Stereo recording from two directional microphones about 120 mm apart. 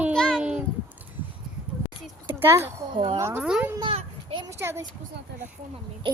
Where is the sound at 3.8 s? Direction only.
50° right (ahead or behind).